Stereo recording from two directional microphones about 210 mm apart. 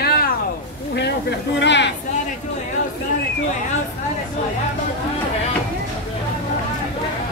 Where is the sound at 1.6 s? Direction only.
55° left (ahead or behind).